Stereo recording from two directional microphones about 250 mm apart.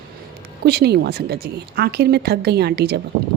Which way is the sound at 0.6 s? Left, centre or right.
Right.